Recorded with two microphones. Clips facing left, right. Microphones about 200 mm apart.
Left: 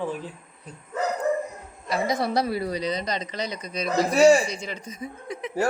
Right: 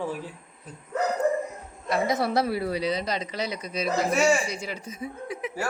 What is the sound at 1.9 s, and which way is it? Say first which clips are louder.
A woman's voice: even; centre (ahead or behind).